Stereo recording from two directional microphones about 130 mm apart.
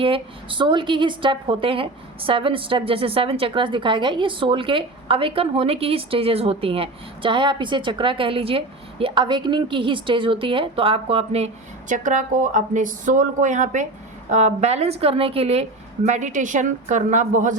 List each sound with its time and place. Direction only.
0.0 s a woman's voice: 40° right (ahead or behind)
11.9 s a woman's voice: 75° right (ahead or behind); by 15.6 s 50° right (ahead or behind)
16.0 s a woman's voice: 65° right (ahead or behind)